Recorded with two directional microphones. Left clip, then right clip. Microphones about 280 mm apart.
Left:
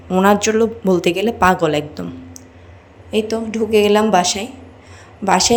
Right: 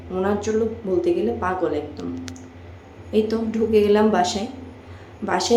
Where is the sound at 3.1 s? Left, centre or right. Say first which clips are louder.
Left 2 dB; centre.